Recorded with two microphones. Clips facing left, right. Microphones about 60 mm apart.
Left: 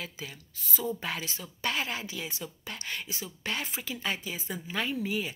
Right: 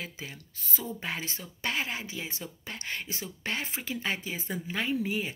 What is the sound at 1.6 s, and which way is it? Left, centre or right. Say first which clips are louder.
A woman's voice: even; right.